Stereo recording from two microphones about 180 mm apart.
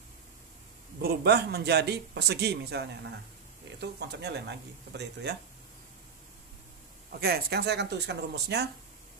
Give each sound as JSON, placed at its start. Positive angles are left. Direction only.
{"t": 1.0, "sound": "a man's voice", "side_deg": -65}
{"t": 7.1, "sound": "speech", "side_deg": -60}